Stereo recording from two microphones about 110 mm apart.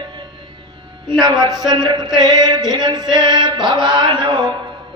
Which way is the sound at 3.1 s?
45° right (ahead or behind).